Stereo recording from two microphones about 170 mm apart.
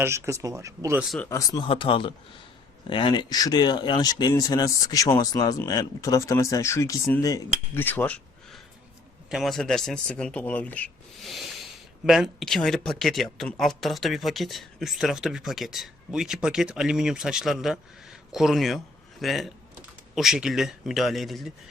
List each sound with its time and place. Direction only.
0.0 s speech: 15° right (ahead or behind)
0.9 s speech: centre (ahead or behind)
1.3 s speech: 20° left (ahead or behind)
1.6 s speech: 30° left (ahead or behind); by 21.5 s centre (ahead or behind)